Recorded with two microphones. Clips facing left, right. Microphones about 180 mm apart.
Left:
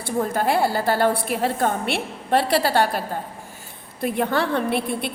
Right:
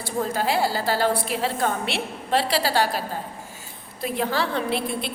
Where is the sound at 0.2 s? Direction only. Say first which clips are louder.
Left 2 dB; 55° left (ahead or behind).